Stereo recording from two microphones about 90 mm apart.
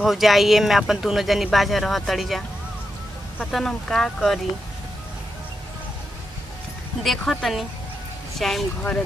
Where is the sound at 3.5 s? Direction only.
5° left (ahead or behind).